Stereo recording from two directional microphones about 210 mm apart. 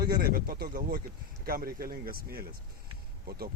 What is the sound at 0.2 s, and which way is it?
Speech, 45° right (ahead or behind).